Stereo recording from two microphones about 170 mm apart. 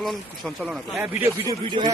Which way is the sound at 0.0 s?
Centre (ahead or behind).